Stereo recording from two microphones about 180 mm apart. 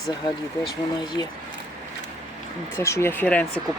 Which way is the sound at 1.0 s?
25° left (ahead or behind).